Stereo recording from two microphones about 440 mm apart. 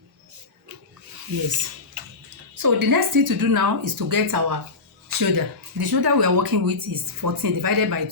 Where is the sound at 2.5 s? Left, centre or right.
Right.